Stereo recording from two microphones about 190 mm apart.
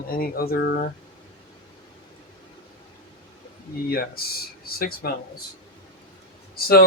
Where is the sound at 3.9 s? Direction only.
50° left (ahead or behind).